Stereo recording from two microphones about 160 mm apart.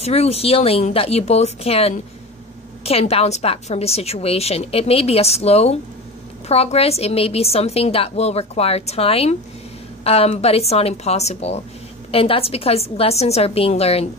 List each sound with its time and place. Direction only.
0.0 s a woman's voice: 40° left (ahead or behind)